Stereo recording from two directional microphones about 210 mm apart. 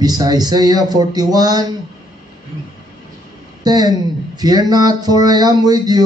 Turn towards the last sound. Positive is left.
turn(degrees=-20)  # may be behind; listen again after turning